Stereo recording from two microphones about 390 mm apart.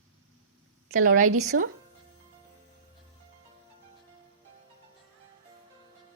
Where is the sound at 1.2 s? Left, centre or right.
Right.